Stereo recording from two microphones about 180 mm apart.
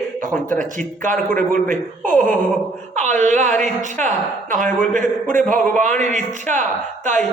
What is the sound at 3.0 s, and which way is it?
Speech, 40° right (ahead or behind).